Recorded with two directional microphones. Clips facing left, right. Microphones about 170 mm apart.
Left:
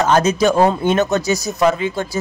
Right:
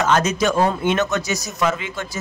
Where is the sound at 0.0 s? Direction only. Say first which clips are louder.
Left 4 dB; 30° left (ahead or behind).